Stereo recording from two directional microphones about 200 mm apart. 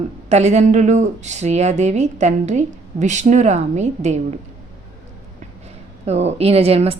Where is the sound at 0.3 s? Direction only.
35° right (ahead or behind).